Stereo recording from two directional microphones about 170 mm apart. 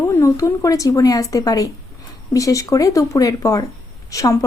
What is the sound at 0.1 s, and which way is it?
Speech, 20° left (ahead or behind).